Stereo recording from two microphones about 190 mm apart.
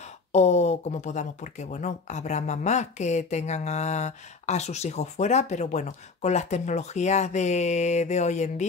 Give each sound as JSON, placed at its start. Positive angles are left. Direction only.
{"t": 0.3, "sound": "speech", "side_deg": 35}